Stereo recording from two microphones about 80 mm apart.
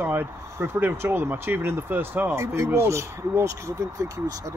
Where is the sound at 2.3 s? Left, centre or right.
Right.